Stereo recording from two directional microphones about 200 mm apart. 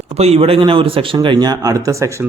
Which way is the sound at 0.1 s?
30° right (ahead or behind).